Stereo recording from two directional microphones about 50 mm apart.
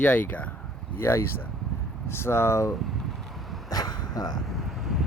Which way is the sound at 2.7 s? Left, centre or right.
Centre.